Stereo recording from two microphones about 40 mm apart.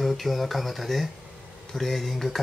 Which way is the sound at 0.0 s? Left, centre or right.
Centre.